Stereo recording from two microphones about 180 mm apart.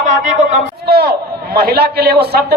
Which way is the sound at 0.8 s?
60° right (ahead or behind).